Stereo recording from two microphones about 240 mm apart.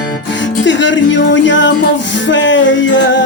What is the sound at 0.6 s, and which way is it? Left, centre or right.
Music, left.